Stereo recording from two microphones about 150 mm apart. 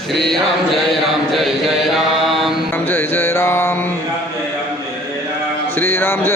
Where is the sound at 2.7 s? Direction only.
10° left (ahead or behind).